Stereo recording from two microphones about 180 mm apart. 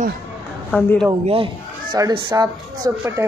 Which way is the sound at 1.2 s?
30° right (ahead or behind).